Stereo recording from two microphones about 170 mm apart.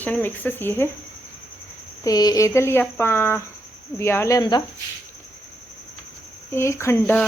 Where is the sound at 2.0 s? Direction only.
20° left (ahead or behind).